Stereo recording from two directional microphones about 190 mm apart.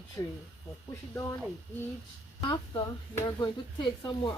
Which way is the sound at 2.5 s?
20° left (ahead or behind).